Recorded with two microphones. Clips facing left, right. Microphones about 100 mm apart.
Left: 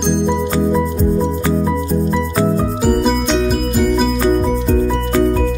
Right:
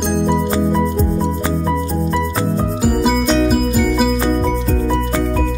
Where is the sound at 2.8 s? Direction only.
Centre (ahead or behind).